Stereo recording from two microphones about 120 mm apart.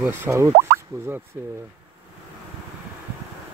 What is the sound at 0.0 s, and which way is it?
Speech, 20° right (ahead or behind).